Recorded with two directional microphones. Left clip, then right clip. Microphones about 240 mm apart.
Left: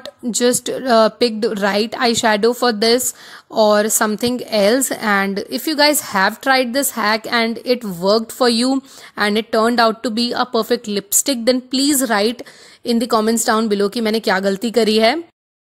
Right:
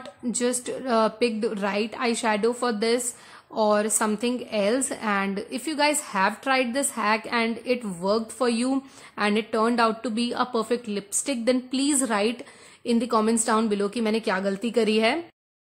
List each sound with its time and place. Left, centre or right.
0.0 s a woman's voice: left